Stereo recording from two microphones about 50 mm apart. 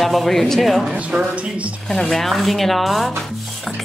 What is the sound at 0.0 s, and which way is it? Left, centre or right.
Speech, centre.